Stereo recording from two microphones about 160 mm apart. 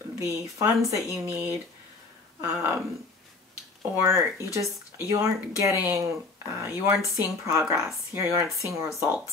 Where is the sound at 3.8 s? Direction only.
20° right (ahead or behind).